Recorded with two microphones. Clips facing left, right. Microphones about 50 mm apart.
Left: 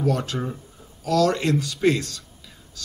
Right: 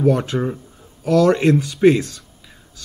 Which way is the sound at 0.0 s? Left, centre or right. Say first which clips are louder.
Right 7 dB; right.